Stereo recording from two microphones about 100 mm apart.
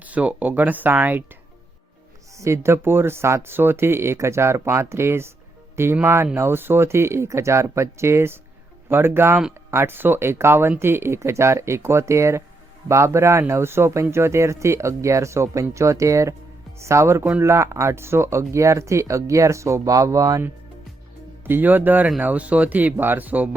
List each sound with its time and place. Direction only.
0.0 s speech: 15° right (ahead or behind)
2.4 s speech: 25° right (ahead or behind)
21.4 s speech: 20° right (ahead or behind)